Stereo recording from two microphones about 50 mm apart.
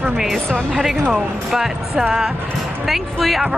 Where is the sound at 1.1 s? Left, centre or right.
Centre.